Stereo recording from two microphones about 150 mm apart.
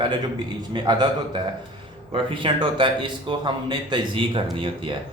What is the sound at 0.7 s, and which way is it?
Speech, 30° right (ahead or behind).